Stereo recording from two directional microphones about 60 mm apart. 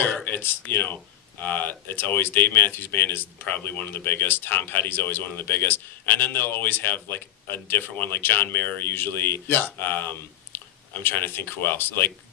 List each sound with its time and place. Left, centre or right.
0.3 s speech: left